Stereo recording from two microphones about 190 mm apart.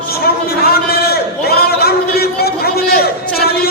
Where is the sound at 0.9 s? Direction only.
55° left (ahead or behind).